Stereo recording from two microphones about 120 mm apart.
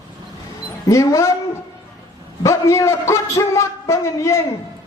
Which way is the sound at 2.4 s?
25° left (ahead or behind).